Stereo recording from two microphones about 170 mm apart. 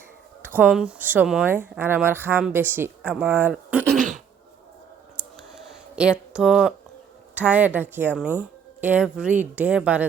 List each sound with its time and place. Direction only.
0.4 s speech: 10° right (ahead or behind)
3.9 s throat clearing: 50° right (ahead or behind)
5.2 s clicking: 5° right (ahead or behind)
6.0 s speech: 5° right (ahead or behind)